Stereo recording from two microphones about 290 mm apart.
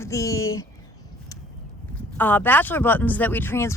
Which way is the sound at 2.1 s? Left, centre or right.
Centre.